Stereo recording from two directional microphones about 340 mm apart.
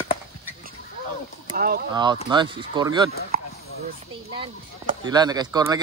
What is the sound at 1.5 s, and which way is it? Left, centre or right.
Speech, right.